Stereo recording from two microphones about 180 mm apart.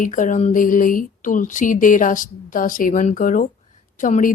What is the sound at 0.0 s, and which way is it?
Speech, 45° left (ahead or behind).